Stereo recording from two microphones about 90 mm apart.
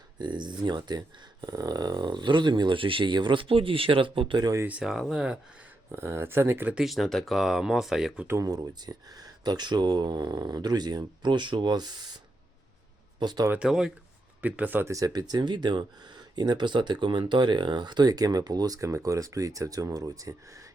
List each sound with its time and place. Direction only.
0.2 s speech: 55° right (ahead or behind); by 4.4 s 75° right (ahead or behind)
4.8 s speech: centre (ahead or behind)
5.9 s speech: 30° right (ahead or behind)
6.8 s speech: centre (ahead or behind)
8.4 s speech: 45° right (ahead or behind)
13.6 s speech: 5° right (ahead or behind)
14.4 s speech: 15° right (ahead or behind)
14.8 s speech: 40° right (ahead or behind)